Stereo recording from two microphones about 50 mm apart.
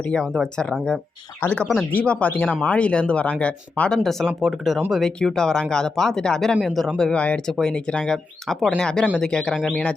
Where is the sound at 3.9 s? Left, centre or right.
Centre.